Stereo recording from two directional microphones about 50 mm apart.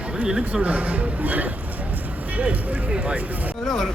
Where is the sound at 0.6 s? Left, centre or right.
Right.